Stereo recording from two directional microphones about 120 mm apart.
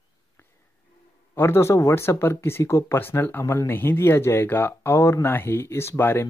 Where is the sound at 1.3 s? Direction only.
20° left (ahead or behind).